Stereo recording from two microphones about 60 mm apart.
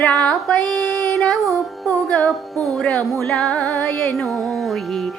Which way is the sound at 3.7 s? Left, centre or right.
Left.